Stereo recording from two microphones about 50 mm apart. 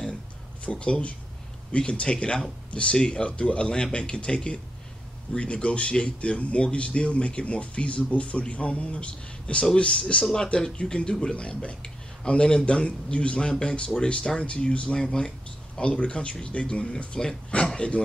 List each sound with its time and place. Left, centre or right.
0.7 s speech: left